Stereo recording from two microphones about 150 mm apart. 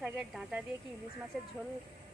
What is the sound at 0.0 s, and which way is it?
Speech, 5° right (ahead or behind).